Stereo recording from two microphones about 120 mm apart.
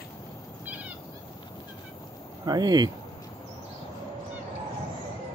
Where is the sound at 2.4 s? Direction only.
35° right (ahead or behind).